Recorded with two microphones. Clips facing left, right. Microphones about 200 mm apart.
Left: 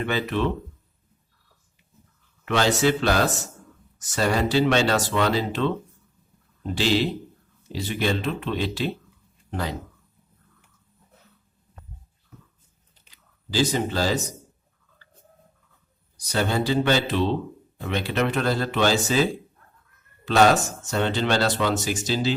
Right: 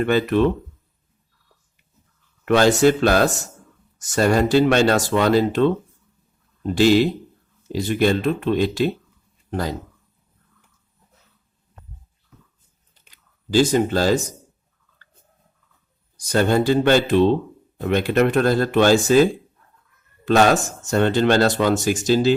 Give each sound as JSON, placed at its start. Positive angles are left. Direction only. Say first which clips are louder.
{"t": 0.0, "sound": "speech", "louder": "right 7 dB", "side_deg": -50}
{"t": 2.4, "sound": "speech", "louder": "right 6 dB", "side_deg": -50}
{"t": 13.5, "sound": "speech", "louder": "right 7 dB", "side_deg": -50}
{"t": 16.3, "sound": "speech", "louder": "right 6 dB", "side_deg": -50}